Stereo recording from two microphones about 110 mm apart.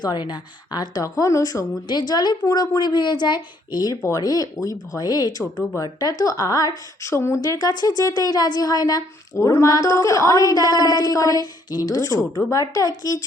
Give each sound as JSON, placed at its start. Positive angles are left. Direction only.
{"t": 0.0, "sound": "speech", "side_deg": 40}